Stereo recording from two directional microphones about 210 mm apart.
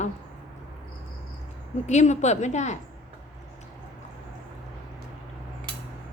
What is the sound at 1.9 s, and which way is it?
Speech, 35° left (ahead or behind).